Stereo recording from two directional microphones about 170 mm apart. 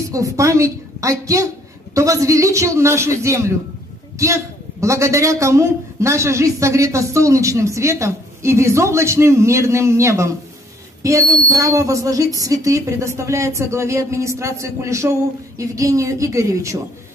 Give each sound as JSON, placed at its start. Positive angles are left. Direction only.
{"t": 0.1, "sound": "a woman's voice", "side_deg": -20}